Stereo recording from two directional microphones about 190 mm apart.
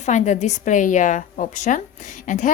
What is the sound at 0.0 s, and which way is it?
A woman's voice, 40° left (ahead or behind).